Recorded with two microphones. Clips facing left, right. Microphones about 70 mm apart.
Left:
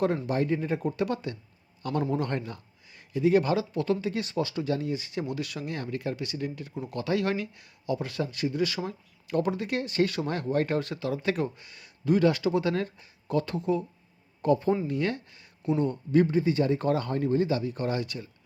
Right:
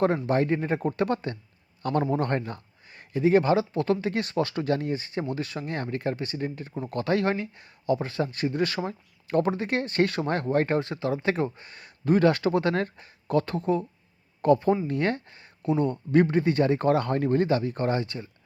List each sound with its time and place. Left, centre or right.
0.3 s speech: right
10.8 s speech: right
15.8 s speech: right